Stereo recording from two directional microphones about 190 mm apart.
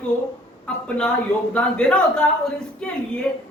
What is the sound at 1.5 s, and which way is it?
Speech, 5° left (ahead or behind).